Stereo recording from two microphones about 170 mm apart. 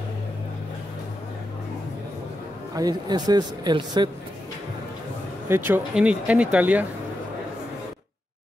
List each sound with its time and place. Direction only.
2.7 s speech: 20° right (ahead or behind)
5.7 s speech: 5° right (ahead or behind)